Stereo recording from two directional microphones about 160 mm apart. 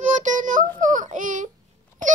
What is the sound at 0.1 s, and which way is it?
Child singing, 50° right (ahead or behind).